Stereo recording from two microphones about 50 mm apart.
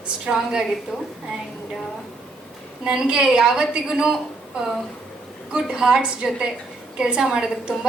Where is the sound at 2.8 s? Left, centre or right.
Centre.